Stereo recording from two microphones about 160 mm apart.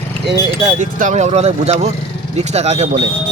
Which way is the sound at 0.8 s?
50° right (ahead or behind).